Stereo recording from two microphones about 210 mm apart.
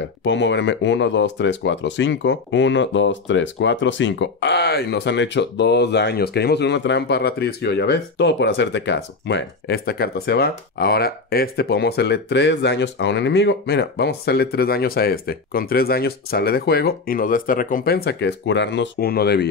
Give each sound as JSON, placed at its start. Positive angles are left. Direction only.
{"t": 0.2, "sound": "speech", "side_deg": 60}